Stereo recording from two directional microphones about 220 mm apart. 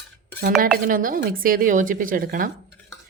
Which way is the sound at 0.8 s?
40° right (ahead or behind).